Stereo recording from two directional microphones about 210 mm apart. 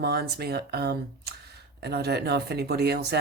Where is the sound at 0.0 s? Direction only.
50° right (ahead or behind).